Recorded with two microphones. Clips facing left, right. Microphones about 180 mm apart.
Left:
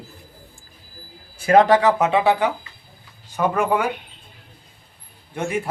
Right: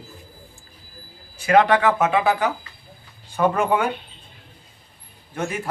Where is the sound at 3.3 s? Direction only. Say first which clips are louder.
Even; centre (ahead or behind).